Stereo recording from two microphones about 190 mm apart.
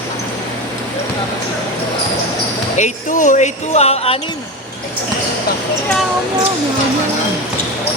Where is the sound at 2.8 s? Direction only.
40° left (ahead or behind).